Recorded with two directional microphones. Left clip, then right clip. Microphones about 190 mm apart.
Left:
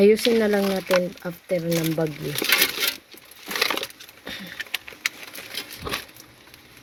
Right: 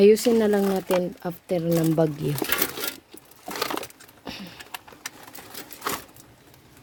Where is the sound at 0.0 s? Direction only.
25° right (ahead or behind).